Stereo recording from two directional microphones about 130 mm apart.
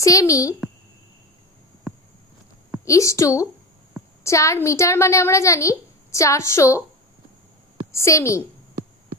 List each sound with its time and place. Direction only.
0.0 s a woman's voice: 25° left (ahead or behind)
2.8 s a woman's voice: 25° left (ahead or behind)
7.9 s a woman's voice: 20° left (ahead or behind)